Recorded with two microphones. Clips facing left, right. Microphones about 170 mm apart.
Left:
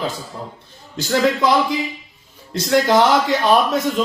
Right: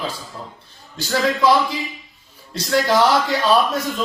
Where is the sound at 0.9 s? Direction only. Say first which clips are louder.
Left 3 dB; 20° left (ahead or behind).